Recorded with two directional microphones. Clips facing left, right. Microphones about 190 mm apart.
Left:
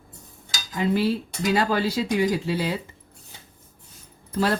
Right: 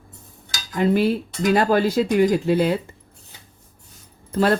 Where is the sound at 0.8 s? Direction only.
55° right (ahead or behind).